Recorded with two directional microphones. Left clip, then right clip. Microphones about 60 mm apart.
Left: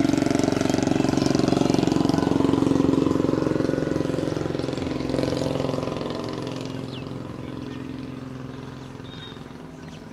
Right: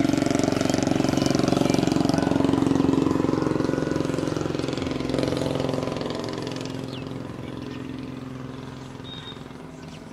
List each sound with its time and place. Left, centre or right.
0.0 s vehicle: centre; by 6.8 s right